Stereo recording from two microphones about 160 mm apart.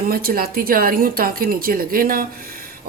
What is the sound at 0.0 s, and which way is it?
Speech, 70° right (ahead or behind).